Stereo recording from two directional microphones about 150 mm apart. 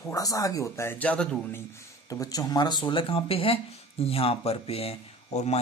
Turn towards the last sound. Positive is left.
turn(degrees=45)  # may be behind; listen again after turning